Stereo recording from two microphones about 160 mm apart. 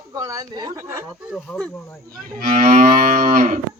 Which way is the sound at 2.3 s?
60° right (ahead or behind).